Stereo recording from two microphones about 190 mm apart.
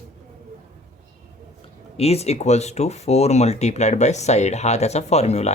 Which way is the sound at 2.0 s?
35° left (ahead or behind).